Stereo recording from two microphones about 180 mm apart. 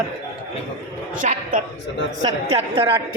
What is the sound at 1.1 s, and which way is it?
Speech, 50° right (ahead or behind).